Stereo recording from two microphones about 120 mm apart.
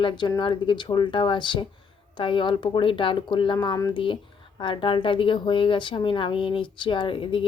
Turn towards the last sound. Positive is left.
turn(degrees=45)  # may be behind; listen again after turning